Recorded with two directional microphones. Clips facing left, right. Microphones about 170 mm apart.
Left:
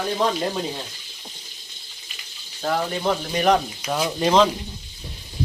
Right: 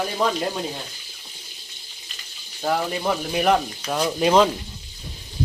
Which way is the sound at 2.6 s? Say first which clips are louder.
Even; 5° right (ahead or behind).